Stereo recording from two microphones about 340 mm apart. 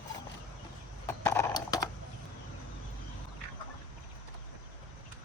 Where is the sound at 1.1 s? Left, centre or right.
Centre.